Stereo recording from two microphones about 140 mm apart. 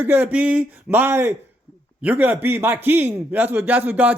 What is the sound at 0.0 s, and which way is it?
A man's voice, 15° right (ahead or behind).